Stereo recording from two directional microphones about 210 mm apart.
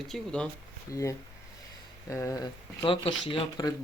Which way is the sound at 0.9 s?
15° left (ahead or behind).